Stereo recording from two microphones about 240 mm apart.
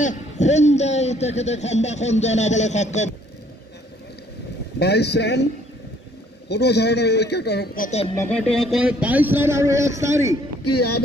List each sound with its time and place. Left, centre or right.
0.0 s a man's voice: left
4.7 s a man's voice: left
6.5 s a man's voice: left
8.2 s speech: centre
10.6 s speech: left